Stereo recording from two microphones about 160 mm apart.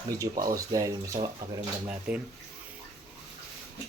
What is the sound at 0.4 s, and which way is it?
Speech, 20° right (ahead or behind).